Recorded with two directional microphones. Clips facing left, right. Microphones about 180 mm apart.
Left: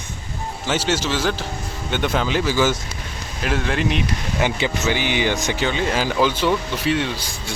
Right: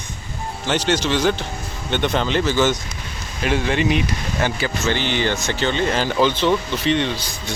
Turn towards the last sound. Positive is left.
turn(degrees=5)  # may be behind; listen again after turning